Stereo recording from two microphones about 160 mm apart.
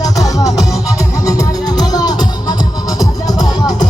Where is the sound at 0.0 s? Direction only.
20° left (ahead or behind).